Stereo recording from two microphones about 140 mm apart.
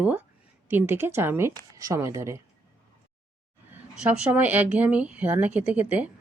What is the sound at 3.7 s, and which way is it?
Speech, 10° right (ahead or behind).